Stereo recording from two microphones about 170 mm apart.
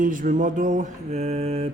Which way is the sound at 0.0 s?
50° right (ahead or behind).